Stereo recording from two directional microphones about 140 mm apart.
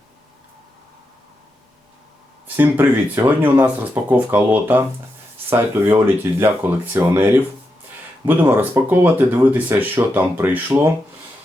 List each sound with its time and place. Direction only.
2.6 s speech: 15° right (ahead or behind)
8.3 s speech: 15° right (ahead or behind)